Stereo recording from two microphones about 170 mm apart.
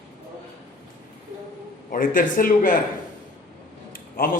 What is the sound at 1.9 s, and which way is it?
Speech, 50° left (ahead or behind).